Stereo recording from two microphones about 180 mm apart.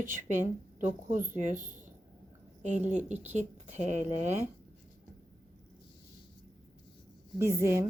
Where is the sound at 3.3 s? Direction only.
40° right (ahead or behind).